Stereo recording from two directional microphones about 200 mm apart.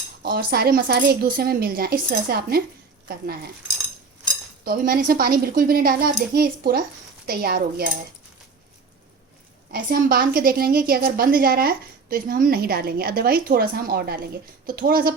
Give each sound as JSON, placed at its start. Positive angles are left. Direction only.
{"t": 0.2, "sound": "a woman's voice", "side_deg": -50}
{"t": 4.6, "sound": "a woman's voice", "side_deg": -45}
{"t": 9.7, "sound": "a woman's voice", "side_deg": -45}